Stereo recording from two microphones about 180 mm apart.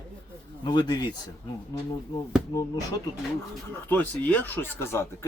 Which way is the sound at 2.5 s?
20° left (ahead or behind).